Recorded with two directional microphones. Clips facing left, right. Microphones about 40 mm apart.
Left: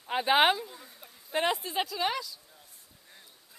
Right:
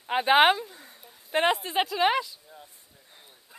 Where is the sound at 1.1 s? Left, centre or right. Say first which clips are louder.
Right 5 dB; right.